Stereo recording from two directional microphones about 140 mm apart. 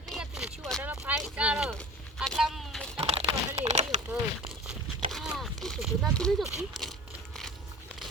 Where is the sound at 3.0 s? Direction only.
45° right (ahead or behind).